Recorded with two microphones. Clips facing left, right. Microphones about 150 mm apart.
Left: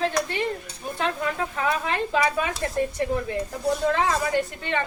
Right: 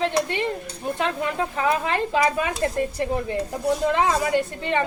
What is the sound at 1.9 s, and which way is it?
Speech, 20° right (ahead or behind).